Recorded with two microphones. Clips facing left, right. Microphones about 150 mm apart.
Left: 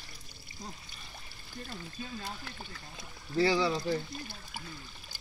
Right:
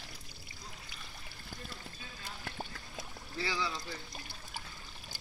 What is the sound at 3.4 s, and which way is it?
Speech, 35° left (ahead or behind).